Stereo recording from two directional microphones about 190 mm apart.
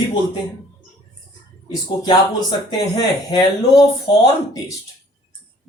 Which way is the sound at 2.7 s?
20° left (ahead or behind).